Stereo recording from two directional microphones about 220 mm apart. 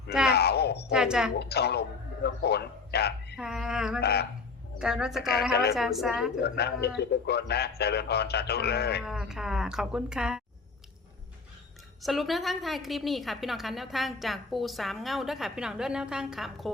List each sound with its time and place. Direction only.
0.3 s a sound: 50° left (ahead or behind)
0.9 s a woman's voice: 5° right (ahead or behind)
1.4 s speech: 45° left (ahead or behind)
3.3 s a woman's voice: centre (ahead or behind)
4.0 s speech: 50° left (ahead or behind)
4.8 s a woman's voice: 5° right (ahead or behind)
6.4 s speech: 50° left (ahead or behind)
9.0 s a woman's voice: centre (ahead or behind)
12.0 s a woman's voice: centre (ahead or behind)